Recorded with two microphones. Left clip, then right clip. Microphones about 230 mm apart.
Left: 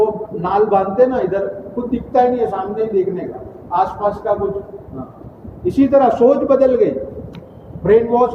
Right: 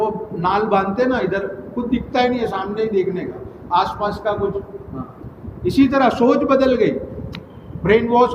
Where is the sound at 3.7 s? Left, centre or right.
Right.